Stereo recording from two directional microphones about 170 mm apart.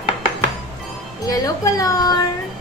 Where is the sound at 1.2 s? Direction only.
20° left (ahead or behind).